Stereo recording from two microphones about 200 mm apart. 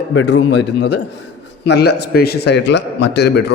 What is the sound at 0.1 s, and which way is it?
A man's voice, 65° left (ahead or behind).